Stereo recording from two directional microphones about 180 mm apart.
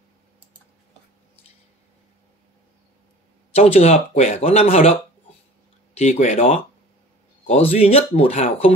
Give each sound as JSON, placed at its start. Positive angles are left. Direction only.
{"t": 3.5, "sound": "speech", "side_deg": 35}
{"t": 5.9, "sound": "speech", "side_deg": 40}
{"t": 7.4, "sound": "speech", "side_deg": 35}